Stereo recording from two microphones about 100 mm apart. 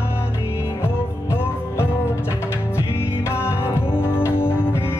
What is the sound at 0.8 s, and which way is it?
Music, 25° left (ahead or behind).